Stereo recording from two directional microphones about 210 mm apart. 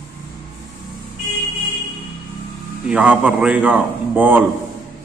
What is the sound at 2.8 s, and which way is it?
A man's voice, 5° right (ahead or behind).